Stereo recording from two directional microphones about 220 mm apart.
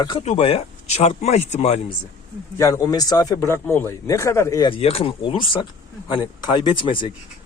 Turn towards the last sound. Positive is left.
turn(degrees=20)  # may be behind; listen again after turning